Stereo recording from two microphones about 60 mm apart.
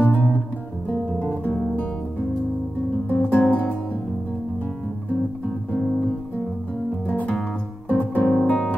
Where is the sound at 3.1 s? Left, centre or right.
Left.